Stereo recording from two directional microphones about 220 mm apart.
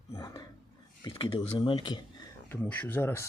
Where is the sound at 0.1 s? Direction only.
15° left (ahead or behind).